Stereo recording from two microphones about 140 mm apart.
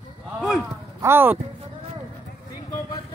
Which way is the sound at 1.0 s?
15° right (ahead or behind).